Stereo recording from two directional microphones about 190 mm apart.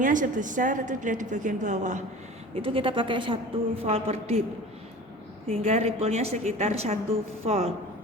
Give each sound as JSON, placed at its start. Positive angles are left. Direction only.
{"t": 0.0, "sound": "a woman's voice", "side_deg": -45}
{"t": 2.6, "sound": "a woman's voice", "side_deg": -30}
{"t": 5.5, "sound": "a woman's voice", "side_deg": -35}